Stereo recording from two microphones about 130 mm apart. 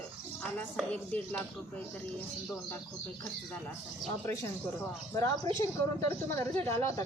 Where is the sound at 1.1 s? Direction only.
15° left (ahead or behind).